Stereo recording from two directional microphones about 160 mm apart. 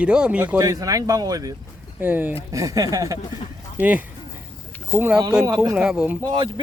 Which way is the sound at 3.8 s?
10° right (ahead or behind).